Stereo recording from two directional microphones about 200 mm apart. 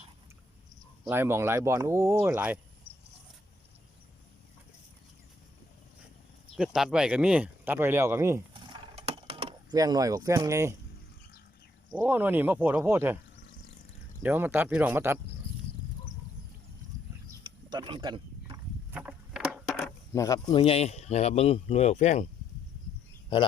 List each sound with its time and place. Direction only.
1.1 s speech: 10° right (ahead or behind)
2.9 s a sound: 30° left (ahead or behind)
6.6 s speech: 5° right (ahead or behind)
8.7 s a sound: 25° right (ahead or behind)
9.7 s speech: 15° right (ahead or behind)
11.9 s speech: 10° right (ahead or behind)
14.2 s speech: 10° right (ahead or behind)
17.4 s mechanisms: 20° right (ahead or behind)
18.9 s vehicle: 5° right (ahead or behind)
20.1 s speech: 15° left (ahead or behind); by 22.3 s 35° left (ahead or behind)